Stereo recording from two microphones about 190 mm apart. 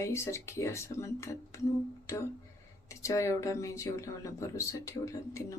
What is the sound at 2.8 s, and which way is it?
Speech, 15° left (ahead or behind).